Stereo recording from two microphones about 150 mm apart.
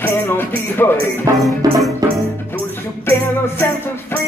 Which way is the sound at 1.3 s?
20° right (ahead or behind).